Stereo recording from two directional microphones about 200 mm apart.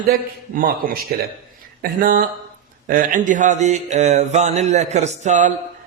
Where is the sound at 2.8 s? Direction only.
40° right (ahead or behind).